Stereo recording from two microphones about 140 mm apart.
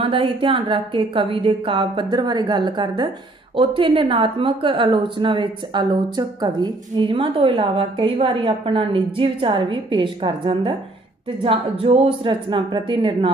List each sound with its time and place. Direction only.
0.0 s a woman's voice: 40° right (ahead or behind)